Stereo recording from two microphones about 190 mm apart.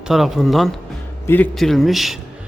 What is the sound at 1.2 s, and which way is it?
Speech, 10° left (ahead or behind).